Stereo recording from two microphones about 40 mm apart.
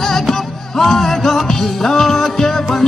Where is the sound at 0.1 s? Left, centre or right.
Centre.